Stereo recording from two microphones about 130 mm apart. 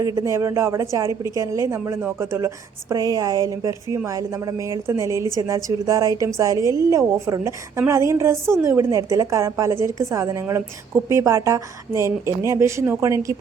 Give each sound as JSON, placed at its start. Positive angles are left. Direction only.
{"t": 0.0, "sound": "a woman's voice", "side_deg": -30}